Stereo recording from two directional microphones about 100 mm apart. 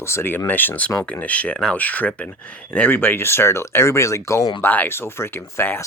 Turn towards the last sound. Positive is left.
turn(degrees=25)  # may be behind; listen again after turning